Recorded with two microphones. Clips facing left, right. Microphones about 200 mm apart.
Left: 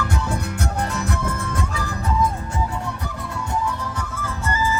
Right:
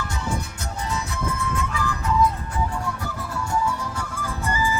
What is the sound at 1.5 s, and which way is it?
Music, 40° left (ahead or behind).